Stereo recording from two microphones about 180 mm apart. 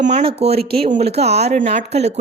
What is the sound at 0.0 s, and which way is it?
Speech, 35° right (ahead or behind).